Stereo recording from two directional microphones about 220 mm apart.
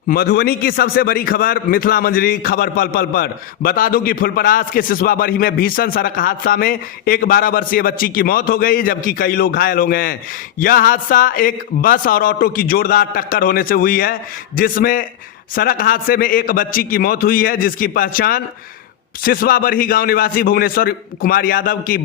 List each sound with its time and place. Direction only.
0.1 s a man's voice: 45° left (ahead or behind)